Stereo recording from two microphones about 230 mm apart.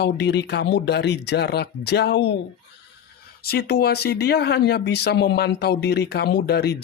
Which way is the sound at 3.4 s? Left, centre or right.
Left.